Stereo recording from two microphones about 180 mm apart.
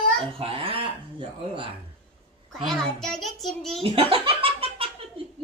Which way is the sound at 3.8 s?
30° right (ahead or behind).